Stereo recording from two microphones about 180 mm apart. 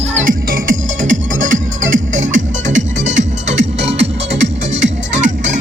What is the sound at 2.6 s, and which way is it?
Music, 90° right.